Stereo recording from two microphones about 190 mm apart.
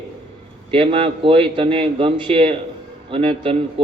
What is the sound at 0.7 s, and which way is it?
A man's voice, 30° right (ahead or behind).